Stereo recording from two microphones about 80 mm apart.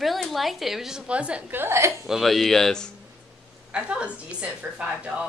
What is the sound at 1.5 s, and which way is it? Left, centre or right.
Speech, right.